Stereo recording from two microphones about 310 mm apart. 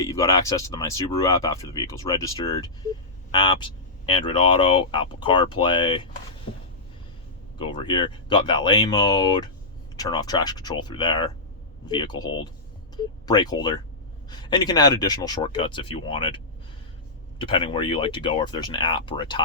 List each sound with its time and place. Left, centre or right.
0.0 s speech: centre
7.6 s speech: centre